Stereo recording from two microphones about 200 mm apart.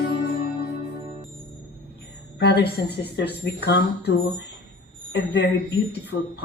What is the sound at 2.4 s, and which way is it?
Speech, 55° left (ahead or behind).